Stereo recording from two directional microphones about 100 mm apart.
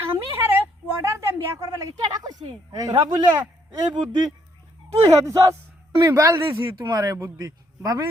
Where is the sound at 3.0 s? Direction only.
55° right (ahead or behind).